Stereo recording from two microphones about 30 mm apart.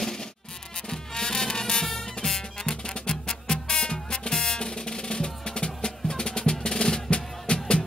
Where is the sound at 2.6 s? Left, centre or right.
Left.